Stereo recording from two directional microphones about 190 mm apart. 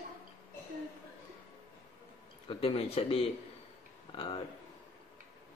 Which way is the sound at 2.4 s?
30° left (ahead or behind).